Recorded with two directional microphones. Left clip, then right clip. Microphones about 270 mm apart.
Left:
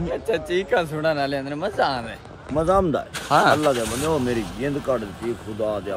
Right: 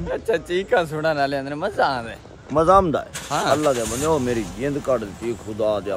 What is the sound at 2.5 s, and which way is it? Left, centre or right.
Speech, centre.